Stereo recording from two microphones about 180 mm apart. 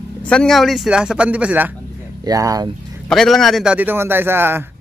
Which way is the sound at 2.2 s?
20° right (ahead or behind).